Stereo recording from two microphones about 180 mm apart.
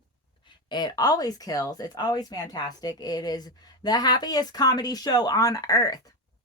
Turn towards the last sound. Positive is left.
turn(degrees=20)  # may be behind; listen again after turning